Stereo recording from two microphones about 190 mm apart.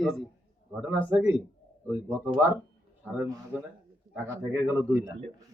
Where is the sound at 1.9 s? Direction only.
10° right (ahead or behind).